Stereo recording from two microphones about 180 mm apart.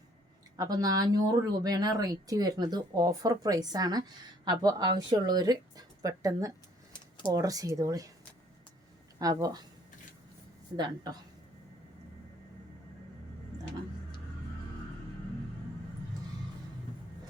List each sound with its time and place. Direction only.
0.5 s speech: 20° right (ahead or behind)
9.1 s speech: 20° right (ahead or behind)
10.8 s speech: 20° right (ahead or behind)